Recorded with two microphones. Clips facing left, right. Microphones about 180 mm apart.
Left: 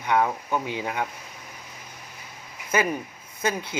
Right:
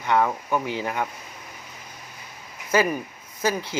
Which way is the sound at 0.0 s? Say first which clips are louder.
Right 1 dB; 15° left (ahead or behind).